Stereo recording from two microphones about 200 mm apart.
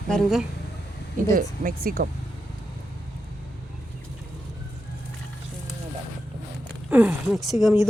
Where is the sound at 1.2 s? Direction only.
45° right (ahead or behind).